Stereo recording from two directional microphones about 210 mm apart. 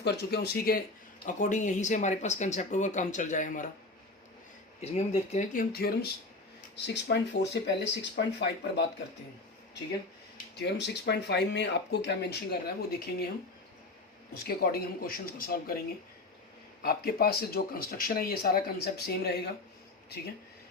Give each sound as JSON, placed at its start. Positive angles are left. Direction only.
{"t": 0.0, "sound": "speech", "side_deg": 50}
{"t": 4.8, "sound": "speech", "side_deg": 30}
{"t": 10.3, "sound": "speech", "side_deg": 50}
{"t": 14.4, "sound": "speech", "side_deg": 45}
{"t": 16.8, "sound": "speech", "side_deg": 45}